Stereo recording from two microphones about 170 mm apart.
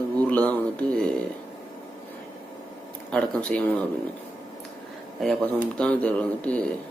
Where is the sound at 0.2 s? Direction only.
10° left (ahead or behind).